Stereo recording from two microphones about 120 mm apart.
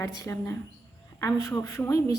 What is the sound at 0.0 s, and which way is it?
A woman's voice, 25° left (ahead or behind).